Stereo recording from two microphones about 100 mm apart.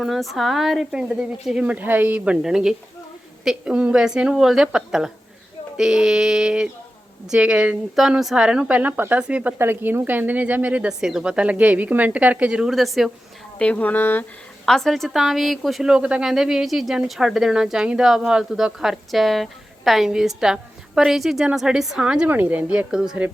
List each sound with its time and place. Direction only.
0.0 s speech: centre (ahead or behind)
13.6 s speech: 15° left (ahead or behind)
14.6 s speech: 5° left (ahead or behind)